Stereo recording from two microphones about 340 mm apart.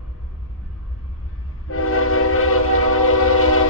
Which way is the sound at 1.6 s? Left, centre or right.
Left.